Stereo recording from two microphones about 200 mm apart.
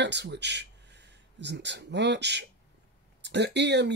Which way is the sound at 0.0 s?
60° right (ahead or behind).